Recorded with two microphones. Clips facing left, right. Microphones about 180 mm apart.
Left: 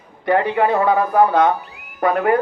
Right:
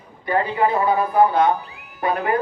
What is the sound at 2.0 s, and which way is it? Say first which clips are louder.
Speech: left 5 dB; 55° left (ahead or behind).